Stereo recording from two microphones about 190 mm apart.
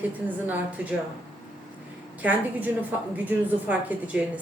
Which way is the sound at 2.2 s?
10° right (ahead or behind).